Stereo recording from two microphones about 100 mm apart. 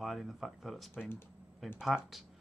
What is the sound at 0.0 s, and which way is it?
Speech, centre (ahead or behind).